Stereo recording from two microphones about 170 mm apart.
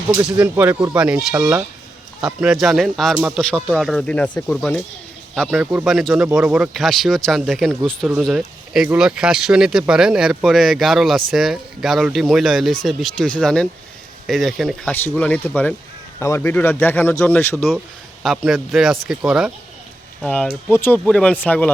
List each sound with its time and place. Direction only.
0.3 s speech: 10° right (ahead or behind); by 21.7 s 10° left (ahead or behind)